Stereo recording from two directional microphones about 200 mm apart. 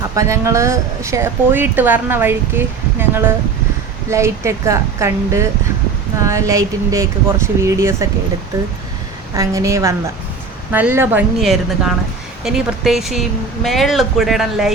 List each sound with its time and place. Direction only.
0.2 s a woman's voice: 15° right (ahead or behind)
9.3 s a woman's voice: 15° right (ahead or behind)